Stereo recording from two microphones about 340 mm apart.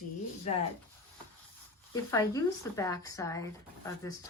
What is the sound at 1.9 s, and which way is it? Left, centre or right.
Speech, centre.